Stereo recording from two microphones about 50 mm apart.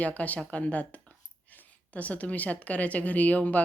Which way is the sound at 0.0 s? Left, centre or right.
Left.